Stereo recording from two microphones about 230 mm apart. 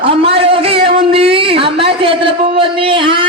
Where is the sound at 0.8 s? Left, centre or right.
Right.